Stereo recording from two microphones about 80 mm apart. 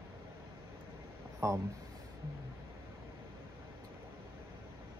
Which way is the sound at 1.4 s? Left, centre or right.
Right.